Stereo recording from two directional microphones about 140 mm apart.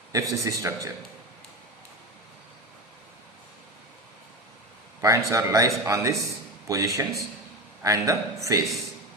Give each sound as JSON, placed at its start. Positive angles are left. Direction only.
{"t": 0.1, "sound": "speech", "side_deg": -25}
{"t": 4.9, "sound": "speech", "side_deg": -20}